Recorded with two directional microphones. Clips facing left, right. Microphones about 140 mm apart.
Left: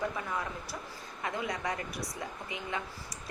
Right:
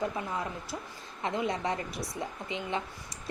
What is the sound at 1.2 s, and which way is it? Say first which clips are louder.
A woman's voice: right 4 dB; 25° right (ahead or behind).